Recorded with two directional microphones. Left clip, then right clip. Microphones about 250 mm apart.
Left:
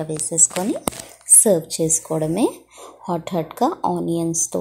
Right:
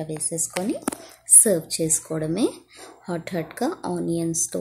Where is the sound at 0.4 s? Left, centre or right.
Centre.